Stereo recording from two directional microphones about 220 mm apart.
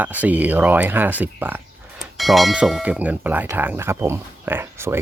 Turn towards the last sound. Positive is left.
turn(degrees=-10)  # may be behind; listen again after turning